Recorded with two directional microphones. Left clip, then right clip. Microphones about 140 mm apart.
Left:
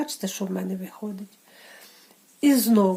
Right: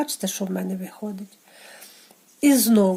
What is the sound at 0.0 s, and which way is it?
Speech, 35° right (ahead or behind).